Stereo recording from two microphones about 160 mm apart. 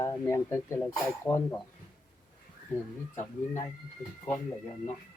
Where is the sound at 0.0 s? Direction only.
15° left (ahead or behind).